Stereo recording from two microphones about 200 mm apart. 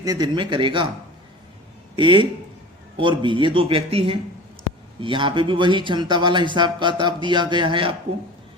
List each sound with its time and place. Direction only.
0.0 s speech: 20° right (ahead or behind)
2.0 s speech: 25° right (ahead or behind)